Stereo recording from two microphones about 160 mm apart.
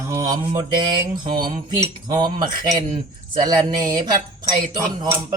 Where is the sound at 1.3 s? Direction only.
65° right (ahead or behind).